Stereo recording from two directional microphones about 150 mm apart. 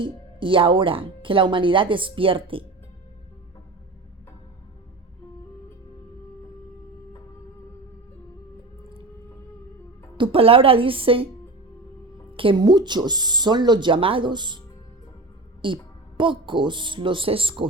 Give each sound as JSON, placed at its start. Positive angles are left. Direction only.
{"t": 0.0, "sound": "speech", "side_deg": -35}
{"t": 10.2, "sound": "speech", "side_deg": -40}
{"t": 12.4, "sound": "speech", "side_deg": -35}
{"t": 15.6, "sound": "speech", "side_deg": -35}